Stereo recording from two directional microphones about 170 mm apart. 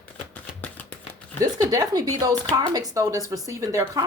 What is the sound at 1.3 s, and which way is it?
Speech, 20° right (ahead or behind).